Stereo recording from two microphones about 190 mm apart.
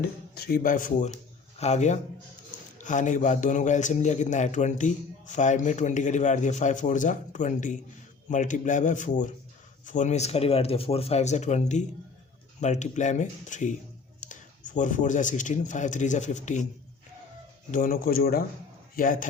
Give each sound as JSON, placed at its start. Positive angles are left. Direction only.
{"t": 0.3, "sound": "a man's voice", "side_deg": 55}
{"t": 17.7, "sound": "speech", "side_deg": 45}